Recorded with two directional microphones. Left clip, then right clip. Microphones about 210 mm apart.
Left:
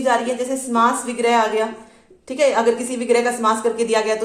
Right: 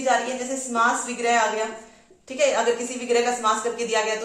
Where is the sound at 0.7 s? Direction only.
50° left (ahead or behind).